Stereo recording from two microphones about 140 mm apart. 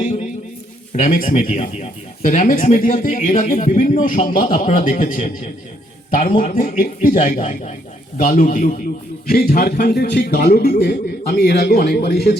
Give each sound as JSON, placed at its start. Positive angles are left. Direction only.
{"t": 0.0, "sound": "a sound", "side_deg": 60}
{"t": 0.9, "sound": "speech", "side_deg": 70}
{"t": 9.2, "sound": "a man's voice", "side_deg": 90}